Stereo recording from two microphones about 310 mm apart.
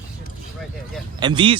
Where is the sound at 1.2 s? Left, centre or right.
Centre.